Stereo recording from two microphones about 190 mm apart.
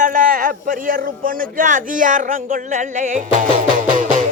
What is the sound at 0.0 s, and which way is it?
Speech, 45° right (ahead or behind).